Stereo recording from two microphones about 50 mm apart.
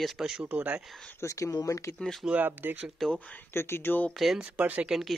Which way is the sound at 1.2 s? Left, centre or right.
Left.